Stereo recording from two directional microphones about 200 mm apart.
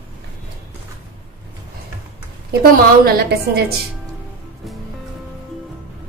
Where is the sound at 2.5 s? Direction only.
50° right (ahead or behind).